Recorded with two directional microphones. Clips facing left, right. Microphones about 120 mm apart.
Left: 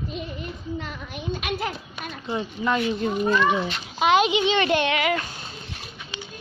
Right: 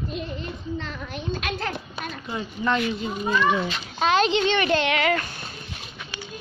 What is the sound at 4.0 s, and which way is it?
Speech, 10° left (ahead or behind).